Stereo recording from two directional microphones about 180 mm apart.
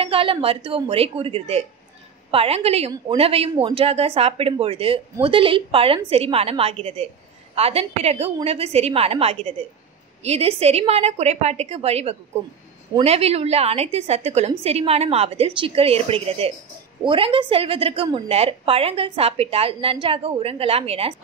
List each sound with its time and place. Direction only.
0.0 s a woman's voice: 30° right (ahead or behind)